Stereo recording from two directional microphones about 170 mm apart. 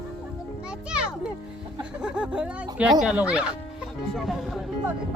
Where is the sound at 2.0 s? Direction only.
5° right (ahead or behind).